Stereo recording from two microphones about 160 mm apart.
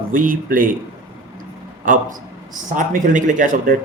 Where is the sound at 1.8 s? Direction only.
55° right (ahead or behind).